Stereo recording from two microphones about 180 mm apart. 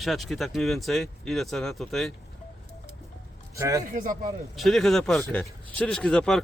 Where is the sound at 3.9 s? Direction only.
45° right (ahead or behind).